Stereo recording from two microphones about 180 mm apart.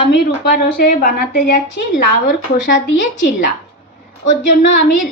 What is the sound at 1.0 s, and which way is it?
Speech, 45° left (ahead or behind).